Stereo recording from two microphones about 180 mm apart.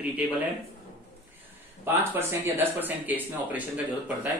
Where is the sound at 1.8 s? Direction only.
10° right (ahead or behind).